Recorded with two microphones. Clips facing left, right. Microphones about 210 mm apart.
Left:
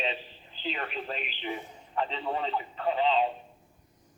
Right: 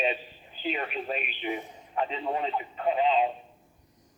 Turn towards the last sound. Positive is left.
turn(degrees=-15)  # may be behind; listen again after turning